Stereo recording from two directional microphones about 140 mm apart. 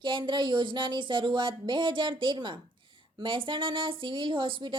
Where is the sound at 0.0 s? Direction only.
35° right (ahead or behind).